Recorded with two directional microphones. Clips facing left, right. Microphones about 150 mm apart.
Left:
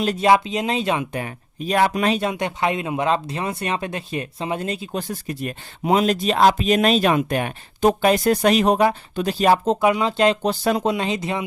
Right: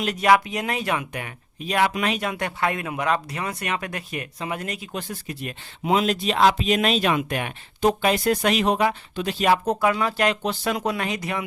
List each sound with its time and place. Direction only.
0.0 s speech: 30° left (ahead or behind)
9.6 s speech: 20° left (ahead or behind)
10.4 s speech: 35° left (ahead or behind)
10.8 s speech: 25° left (ahead or behind)